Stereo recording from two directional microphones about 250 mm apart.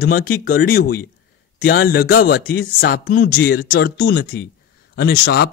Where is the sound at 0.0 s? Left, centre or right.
Left.